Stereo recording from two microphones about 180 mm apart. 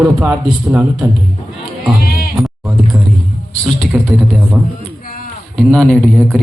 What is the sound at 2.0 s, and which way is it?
Bleat, 55° left (ahead or behind).